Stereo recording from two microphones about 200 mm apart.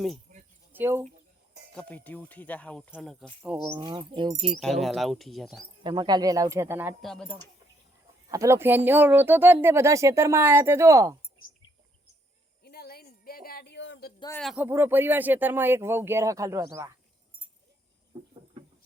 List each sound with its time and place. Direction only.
0.3 s a sound: 40° right (ahead or behind)
0.7 s speech: 10° right (ahead or behind)
1.7 s speech: 5° left (ahead or behind); by 3.8 s 10° right (ahead or behind)
3.8 s speech: 25° right (ahead or behind)
4.5 s speech: centre (ahead or behind)
5.8 s speech: 20° right (ahead or behind)
7.0 s speech: 5° left (ahead or behind)
8.3 s speech: 15° right (ahead or behind)
12.6 s a sound: 50° left (ahead or behind)
14.3 s speech: centre (ahead or behind)